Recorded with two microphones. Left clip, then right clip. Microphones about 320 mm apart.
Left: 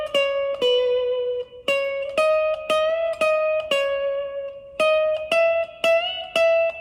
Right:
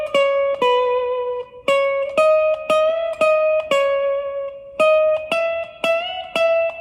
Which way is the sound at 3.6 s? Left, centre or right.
Centre.